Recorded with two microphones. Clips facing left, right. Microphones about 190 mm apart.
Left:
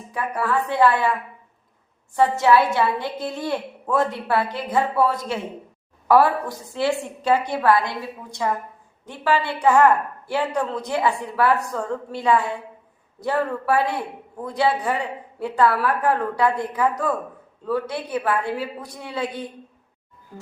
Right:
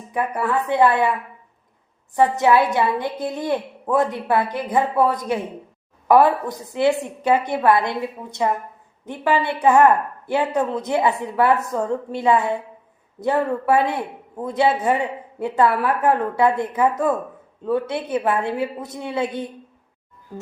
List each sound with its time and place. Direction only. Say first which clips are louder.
0.1 s speech: right 2 dB; 20° right (ahead or behind)
2.1 s a woman's voice: right 1 dB; 20° right (ahead or behind)